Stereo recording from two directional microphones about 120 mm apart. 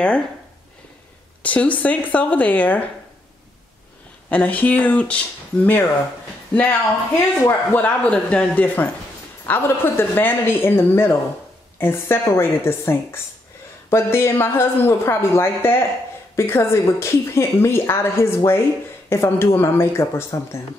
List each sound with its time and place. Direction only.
1.4 s a man's voice: 10° left (ahead or behind)
4.3 s a man's voice: 15° left (ahead or behind)